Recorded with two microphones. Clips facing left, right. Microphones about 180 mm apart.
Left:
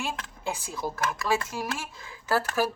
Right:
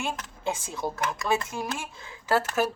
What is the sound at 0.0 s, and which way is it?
Speech, 25° right (ahead or behind).